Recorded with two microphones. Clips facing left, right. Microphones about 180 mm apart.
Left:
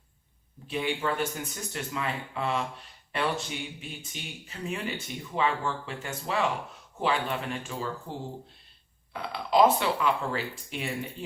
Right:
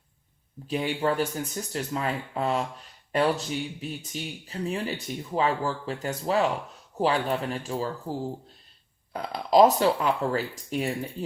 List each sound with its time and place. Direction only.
0.7 s speech: 40° right (ahead or behind)